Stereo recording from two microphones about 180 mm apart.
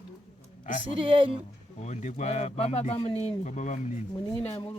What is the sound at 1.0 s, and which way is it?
Speech, 30° right (ahead or behind).